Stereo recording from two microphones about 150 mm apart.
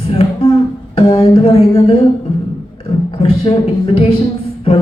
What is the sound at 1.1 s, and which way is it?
Speech, 35° left (ahead or behind).